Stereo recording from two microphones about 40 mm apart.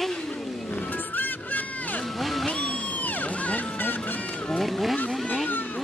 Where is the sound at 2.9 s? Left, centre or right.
Left.